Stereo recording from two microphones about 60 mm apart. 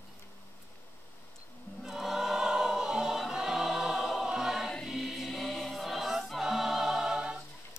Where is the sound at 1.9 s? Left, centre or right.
Centre.